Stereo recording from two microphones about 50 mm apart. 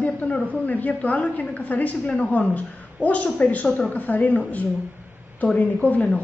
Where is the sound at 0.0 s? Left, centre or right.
Left.